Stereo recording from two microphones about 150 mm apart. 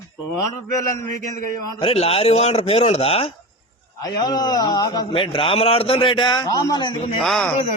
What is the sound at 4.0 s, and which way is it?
A man's voice, 25° left (ahead or behind).